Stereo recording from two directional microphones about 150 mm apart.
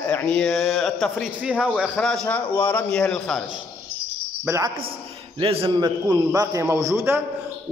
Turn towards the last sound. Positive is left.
turn(degrees=-15)  # may be behind; listen again after turning